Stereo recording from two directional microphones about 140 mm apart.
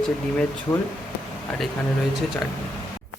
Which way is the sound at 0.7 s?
25° left (ahead or behind).